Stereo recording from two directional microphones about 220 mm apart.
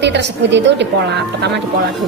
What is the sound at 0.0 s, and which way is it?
Speech, 50° right (ahead or behind).